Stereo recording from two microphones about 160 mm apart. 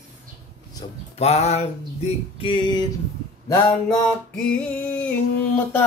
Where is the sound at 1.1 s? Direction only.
40° left (ahead or behind); by 4.0 s 20° left (ahead or behind).